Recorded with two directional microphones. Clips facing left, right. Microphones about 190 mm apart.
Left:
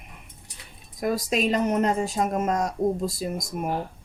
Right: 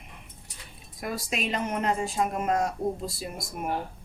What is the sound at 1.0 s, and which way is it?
A woman's voice, 40° left (ahead or behind).